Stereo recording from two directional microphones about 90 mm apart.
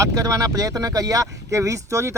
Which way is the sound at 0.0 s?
40° right (ahead or behind).